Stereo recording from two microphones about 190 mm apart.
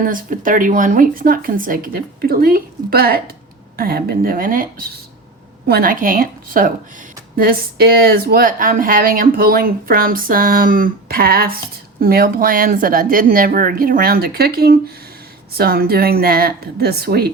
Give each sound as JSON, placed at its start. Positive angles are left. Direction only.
{"t": 0.0, "sound": "speech", "side_deg": -45}